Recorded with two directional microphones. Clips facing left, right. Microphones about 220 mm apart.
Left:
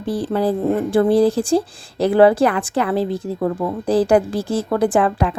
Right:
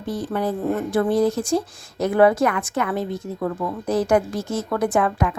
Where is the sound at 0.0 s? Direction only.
30° left (ahead or behind).